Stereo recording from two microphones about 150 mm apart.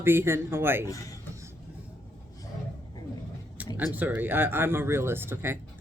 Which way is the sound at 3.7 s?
10° right (ahead or behind).